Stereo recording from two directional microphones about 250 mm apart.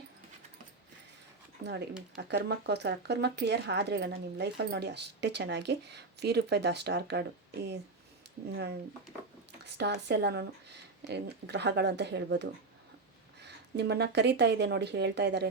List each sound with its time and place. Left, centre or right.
1.6 s speech: right
9.6 s speech: right